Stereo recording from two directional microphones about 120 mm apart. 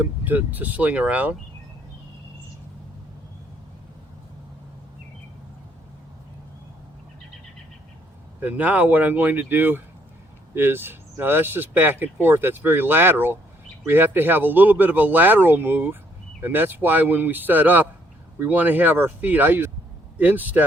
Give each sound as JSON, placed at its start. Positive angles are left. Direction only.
{"t": 0.0, "sound": "speech", "side_deg": -15}
{"t": 8.4, "sound": "speech", "side_deg": -15}